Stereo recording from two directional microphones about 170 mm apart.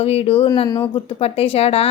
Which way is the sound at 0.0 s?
35° left (ahead or behind).